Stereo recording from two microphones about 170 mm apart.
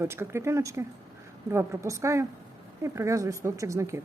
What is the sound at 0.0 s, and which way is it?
A woman's voice, 15° right (ahead or behind).